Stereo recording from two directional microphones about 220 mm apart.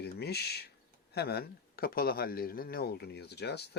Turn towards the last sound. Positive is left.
turn(degrees=50)  # may be behind; listen again after turning